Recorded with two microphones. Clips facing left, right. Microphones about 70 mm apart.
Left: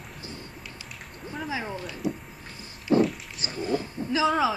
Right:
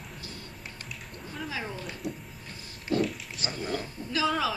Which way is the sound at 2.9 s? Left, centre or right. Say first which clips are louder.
Left 6 dB; left.